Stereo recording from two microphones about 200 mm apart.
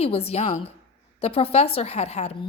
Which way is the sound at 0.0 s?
30° left (ahead or behind).